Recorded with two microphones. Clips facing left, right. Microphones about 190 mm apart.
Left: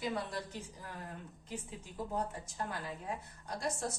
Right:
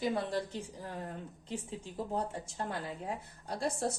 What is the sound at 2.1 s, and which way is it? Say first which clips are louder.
A woman's voice: right 2 dB; 30° right (ahead or behind).